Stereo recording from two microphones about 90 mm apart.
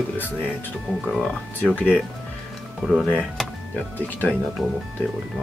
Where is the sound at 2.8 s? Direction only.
5° right (ahead or behind).